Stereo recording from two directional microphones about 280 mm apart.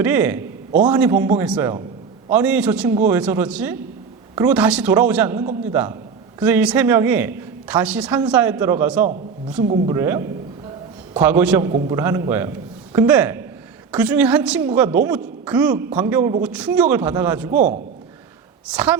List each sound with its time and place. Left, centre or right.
0.0 s a man's voice: centre
18.7 s a man's voice: centre